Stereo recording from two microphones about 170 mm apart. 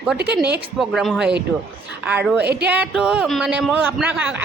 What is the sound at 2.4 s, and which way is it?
Speech, 75° right (ahead or behind).